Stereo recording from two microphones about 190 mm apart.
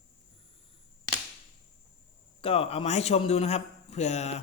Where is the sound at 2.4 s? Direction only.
30° left (ahead or behind).